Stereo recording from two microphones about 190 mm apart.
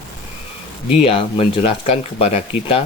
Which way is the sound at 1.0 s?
30° left (ahead or behind).